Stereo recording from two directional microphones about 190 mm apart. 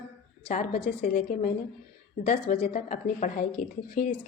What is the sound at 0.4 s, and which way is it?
Speech, 30° left (ahead or behind).